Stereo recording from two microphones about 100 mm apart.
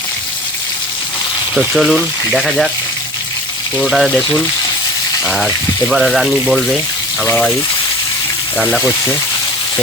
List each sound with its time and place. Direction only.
1.5 s speech: centre (ahead or behind)
3.8 s speech: centre (ahead or behind)